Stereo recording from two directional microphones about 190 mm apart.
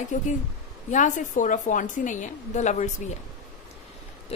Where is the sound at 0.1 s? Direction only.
40° left (ahead or behind).